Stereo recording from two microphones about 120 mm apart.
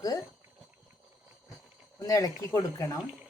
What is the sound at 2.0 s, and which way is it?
Speech, 30° left (ahead or behind).